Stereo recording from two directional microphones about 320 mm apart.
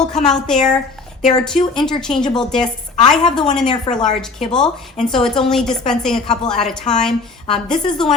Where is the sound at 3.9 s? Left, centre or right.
Centre.